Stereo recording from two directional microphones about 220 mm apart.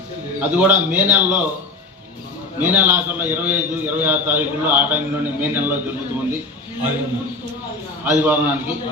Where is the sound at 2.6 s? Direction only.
10° right (ahead or behind).